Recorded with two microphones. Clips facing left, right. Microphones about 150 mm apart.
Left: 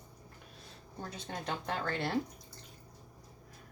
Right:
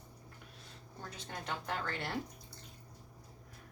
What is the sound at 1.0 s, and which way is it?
Speech, 30° left (ahead or behind).